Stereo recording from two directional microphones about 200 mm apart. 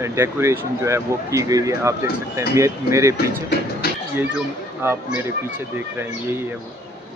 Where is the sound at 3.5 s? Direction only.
50° left (ahead or behind).